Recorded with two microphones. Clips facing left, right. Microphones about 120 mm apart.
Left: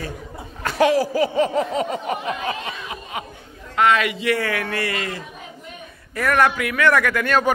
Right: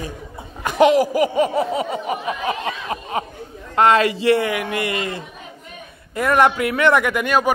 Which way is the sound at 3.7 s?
35° right (ahead or behind).